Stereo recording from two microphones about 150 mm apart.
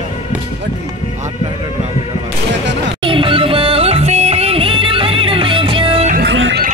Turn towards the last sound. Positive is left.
turn(degrees=-70)  # may be behind; listen again after turning